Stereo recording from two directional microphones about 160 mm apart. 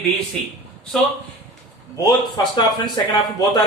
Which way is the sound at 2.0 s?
25° left (ahead or behind).